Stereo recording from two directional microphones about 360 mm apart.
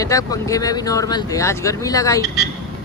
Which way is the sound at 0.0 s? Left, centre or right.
Centre.